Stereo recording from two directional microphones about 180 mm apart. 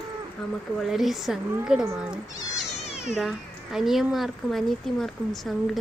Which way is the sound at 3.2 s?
Centre (ahead or behind).